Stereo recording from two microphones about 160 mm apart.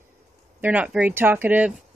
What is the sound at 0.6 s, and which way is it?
Speech, 10° right (ahead or behind).